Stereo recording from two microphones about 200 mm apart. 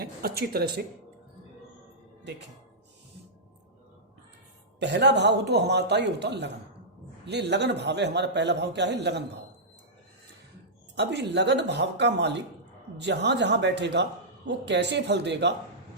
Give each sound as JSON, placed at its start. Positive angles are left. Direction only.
{"t": 0.0, "sound": "speech", "side_deg": -50}
{"t": 4.8, "sound": "a man's voice", "side_deg": -60}
{"t": 10.9, "sound": "a man's voice", "side_deg": -60}